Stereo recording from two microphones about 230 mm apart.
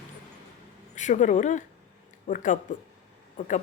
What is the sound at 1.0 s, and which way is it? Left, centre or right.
Speech, left.